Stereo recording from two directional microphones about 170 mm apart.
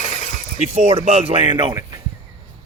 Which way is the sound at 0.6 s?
40° right (ahead or behind).